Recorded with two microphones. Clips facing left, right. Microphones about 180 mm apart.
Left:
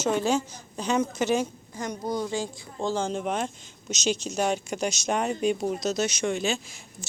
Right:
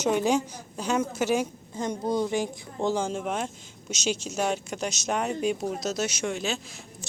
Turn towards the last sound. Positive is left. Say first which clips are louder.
# left 3 dB
turn(degrees=0)  # may be behind; listen again after turning